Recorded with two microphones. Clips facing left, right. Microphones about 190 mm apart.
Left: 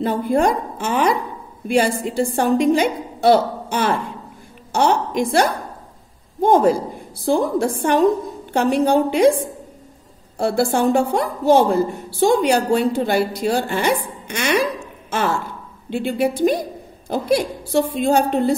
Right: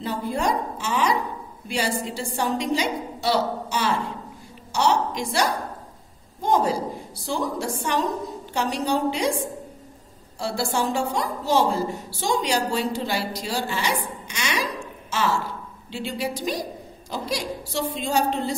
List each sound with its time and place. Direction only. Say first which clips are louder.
0.0 s a woman's voice: left 8 dB; 55° left (ahead or behind)